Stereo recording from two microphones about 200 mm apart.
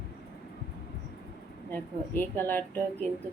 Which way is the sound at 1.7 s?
10° left (ahead or behind).